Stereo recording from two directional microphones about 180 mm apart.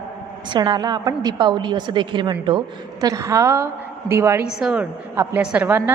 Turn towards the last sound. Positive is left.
turn(degrees=-10)  # may be behind; listen again after turning